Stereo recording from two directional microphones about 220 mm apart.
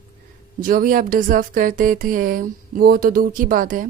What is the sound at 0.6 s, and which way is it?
Speech, 40° right (ahead or behind).